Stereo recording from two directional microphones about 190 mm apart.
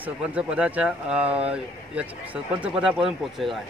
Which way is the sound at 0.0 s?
5° right (ahead or behind).